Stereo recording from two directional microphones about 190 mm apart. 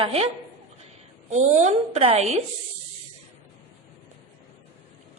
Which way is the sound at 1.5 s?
35° right (ahead or behind).